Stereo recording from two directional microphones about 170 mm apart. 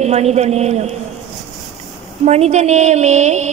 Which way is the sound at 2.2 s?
40° right (ahead or behind).